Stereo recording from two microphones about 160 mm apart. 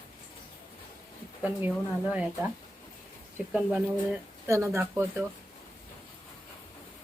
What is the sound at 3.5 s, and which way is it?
Speech, 5° right (ahead or behind).